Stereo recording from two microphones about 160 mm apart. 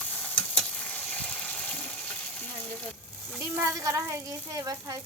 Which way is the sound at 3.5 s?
15° right (ahead or behind).